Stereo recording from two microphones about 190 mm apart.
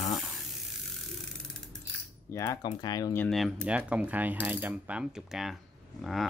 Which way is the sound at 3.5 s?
5° right (ahead or behind).